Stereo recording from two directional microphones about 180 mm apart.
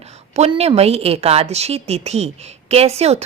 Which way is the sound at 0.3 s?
35° right (ahead or behind).